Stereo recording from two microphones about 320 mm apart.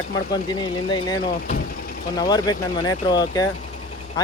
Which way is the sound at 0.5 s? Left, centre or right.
Centre.